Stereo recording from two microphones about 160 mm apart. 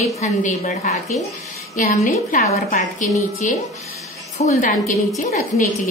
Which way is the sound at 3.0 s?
55° left (ahead or behind).